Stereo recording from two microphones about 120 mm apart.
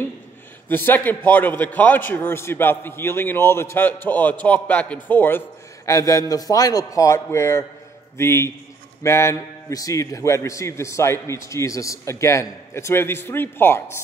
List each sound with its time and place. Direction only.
0.7 s a man's voice: 15° left (ahead or behind)
5.9 s a man's voice: 30° left (ahead or behind)